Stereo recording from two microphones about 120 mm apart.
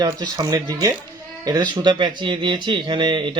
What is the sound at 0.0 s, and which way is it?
Speech, 35° right (ahead or behind).